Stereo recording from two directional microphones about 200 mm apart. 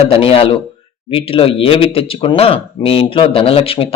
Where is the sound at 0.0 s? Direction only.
30° left (ahead or behind).